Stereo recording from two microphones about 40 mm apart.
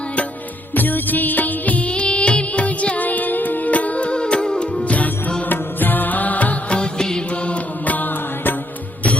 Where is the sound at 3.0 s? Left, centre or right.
Left; by 4.9 s centre.